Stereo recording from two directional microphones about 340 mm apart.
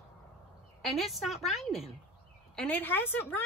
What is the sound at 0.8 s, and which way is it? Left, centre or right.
A woman's voice, centre.